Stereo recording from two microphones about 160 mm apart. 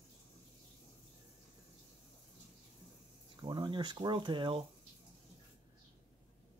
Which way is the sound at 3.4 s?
30° right (ahead or behind).